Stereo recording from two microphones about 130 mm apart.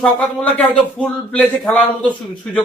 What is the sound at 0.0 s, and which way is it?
A man's voice, 10° left (ahead or behind).